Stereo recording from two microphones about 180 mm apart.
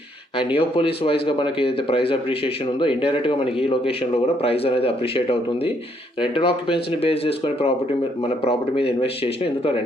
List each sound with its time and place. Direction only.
0.3 s speech: 30° left (ahead or behind)